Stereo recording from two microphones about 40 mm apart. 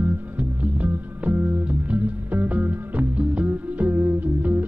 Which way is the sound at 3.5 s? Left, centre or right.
Right.